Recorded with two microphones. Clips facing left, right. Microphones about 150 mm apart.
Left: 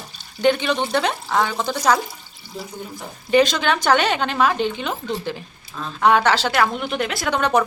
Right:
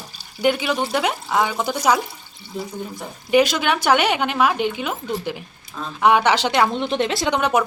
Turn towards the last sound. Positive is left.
turn(degrees=-10)  # may be behind; listen again after turning